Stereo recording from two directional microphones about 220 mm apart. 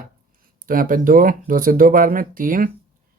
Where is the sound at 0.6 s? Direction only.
40° right (ahead or behind).